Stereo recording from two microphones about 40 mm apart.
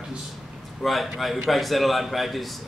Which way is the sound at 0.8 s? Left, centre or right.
Centre.